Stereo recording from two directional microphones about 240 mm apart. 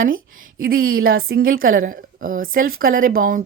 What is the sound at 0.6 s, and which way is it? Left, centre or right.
A woman's voice, right.